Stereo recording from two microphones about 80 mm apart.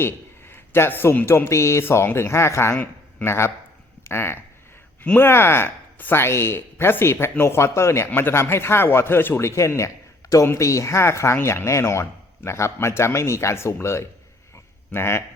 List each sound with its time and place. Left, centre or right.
0.0 s speech: left